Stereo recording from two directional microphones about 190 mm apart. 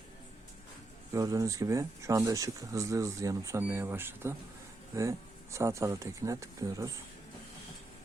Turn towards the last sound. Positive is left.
turn(degrees=-20)  # may be behind; listen again after turning